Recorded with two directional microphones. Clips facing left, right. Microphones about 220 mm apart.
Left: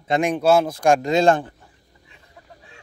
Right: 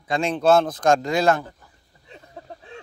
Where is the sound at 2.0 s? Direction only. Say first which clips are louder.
Right 9 dB; 35° right (ahead or behind).